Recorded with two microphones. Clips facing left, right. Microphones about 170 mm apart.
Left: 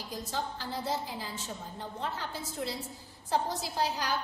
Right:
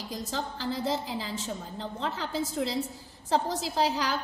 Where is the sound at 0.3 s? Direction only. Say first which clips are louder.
Right 3 dB; 90° right.